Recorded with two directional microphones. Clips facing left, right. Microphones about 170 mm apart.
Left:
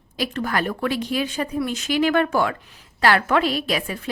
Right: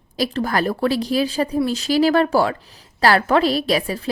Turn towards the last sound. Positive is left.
turn(degrees=-35)  # may be behind; listen again after turning